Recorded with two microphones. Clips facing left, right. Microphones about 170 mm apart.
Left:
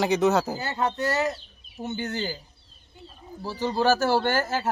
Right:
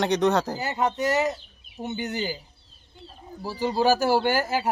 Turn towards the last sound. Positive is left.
turn(degrees=-10)  # may be behind; listen again after turning